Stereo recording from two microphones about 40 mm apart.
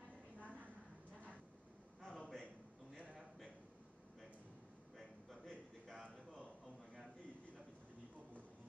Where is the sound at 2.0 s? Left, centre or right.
Left.